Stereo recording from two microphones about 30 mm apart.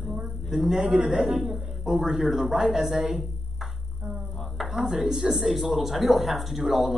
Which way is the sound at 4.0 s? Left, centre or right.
Right.